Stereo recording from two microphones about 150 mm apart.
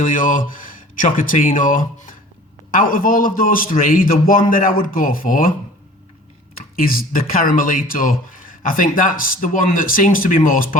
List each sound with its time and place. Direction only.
0.0 s speech: 60° left (ahead or behind)
6.8 s speech: 70° left (ahead or behind)